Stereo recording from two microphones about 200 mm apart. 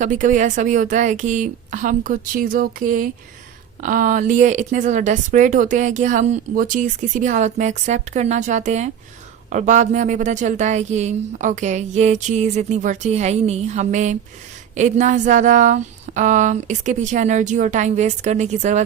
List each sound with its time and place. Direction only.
0.0 s speech: 40° right (ahead or behind)